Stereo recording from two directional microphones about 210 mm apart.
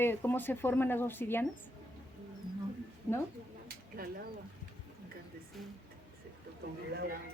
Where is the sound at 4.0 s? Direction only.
45° right (ahead or behind).